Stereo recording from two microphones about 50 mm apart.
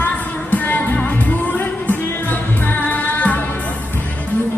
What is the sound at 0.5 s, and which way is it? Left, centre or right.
Music, left.